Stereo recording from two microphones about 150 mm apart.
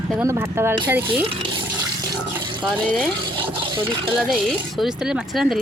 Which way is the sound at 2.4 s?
30° right (ahead or behind).